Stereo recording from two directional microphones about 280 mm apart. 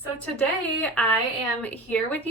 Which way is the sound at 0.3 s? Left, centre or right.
Centre.